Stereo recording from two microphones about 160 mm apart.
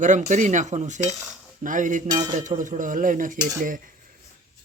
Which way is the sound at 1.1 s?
5° right (ahead or behind).